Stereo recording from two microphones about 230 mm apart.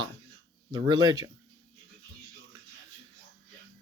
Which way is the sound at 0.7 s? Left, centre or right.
Centre.